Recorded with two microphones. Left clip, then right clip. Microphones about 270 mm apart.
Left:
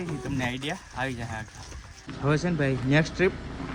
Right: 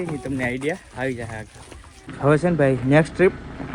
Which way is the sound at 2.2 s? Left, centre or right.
Right.